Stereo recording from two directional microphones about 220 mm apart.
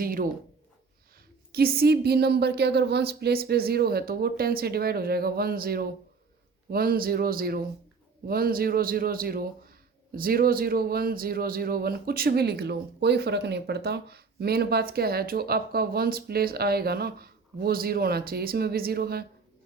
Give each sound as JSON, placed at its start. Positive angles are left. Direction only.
{"t": 0.0, "sound": "speech", "side_deg": -40}
{"t": 1.5, "sound": "a man's voice", "side_deg": -45}